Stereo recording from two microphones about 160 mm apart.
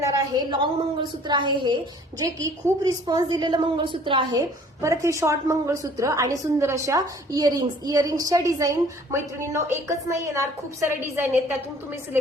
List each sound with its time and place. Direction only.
0.0 s a woman's voice: 25° right (ahead or behind)